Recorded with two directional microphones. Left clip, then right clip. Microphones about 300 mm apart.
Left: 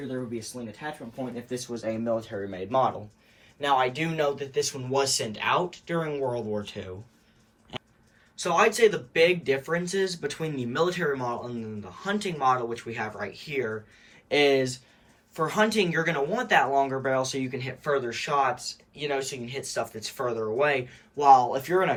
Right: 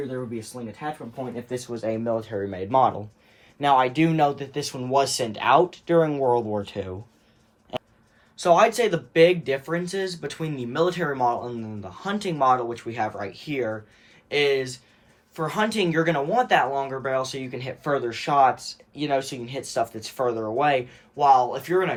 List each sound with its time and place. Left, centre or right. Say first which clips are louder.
1.5 s speech: right 4 dB; right
8.4 s speech: right 3 dB; centre
14.3 s speech: even; centre